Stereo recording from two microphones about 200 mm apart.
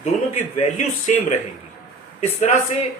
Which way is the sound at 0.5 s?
35° left (ahead or behind).